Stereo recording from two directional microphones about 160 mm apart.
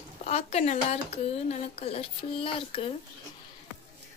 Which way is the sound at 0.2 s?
40° left (ahead or behind).